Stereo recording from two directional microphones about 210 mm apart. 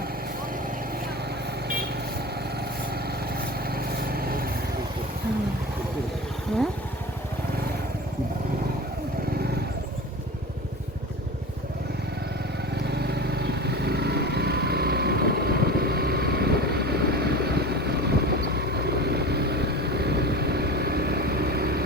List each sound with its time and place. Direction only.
3.3 s vehicle: 45° right (ahead or behind)
12.8 s vehicle: 50° right (ahead or behind)